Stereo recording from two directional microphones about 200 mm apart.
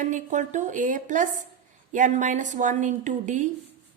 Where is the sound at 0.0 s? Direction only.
40° right (ahead or behind).